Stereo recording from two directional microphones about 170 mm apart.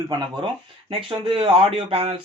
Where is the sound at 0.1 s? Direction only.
25° right (ahead or behind).